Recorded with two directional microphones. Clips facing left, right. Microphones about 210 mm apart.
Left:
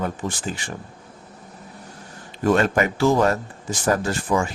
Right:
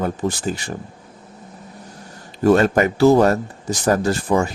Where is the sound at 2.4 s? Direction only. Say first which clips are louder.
Right 4 dB; 40° right (ahead or behind).